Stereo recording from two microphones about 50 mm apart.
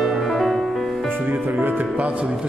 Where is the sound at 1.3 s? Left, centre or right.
Right.